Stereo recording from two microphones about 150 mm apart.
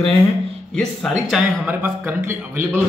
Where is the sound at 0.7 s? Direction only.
Centre (ahead or behind).